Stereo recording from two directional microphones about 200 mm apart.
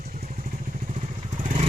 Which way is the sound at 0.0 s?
40° right (ahead or behind).